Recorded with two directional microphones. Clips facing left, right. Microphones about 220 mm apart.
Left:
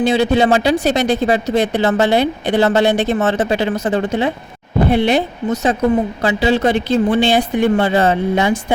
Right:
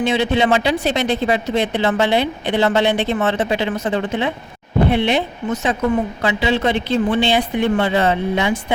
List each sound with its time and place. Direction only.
0.0 s a woman's voice: 35° left (ahead or behind)